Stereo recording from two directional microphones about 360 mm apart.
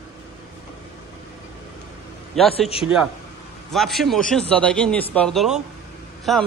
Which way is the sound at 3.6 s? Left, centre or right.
Centre.